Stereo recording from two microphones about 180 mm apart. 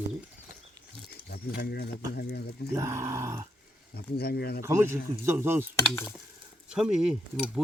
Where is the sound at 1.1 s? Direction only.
60° left (ahead or behind).